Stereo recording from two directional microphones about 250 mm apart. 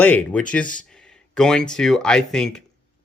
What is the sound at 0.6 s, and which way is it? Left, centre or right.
Speech, left.